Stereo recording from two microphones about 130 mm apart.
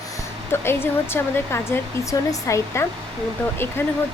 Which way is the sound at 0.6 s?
20° left (ahead or behind).